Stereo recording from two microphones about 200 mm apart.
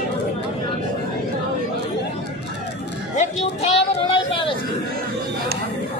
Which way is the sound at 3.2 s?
30° left (ahead or behind).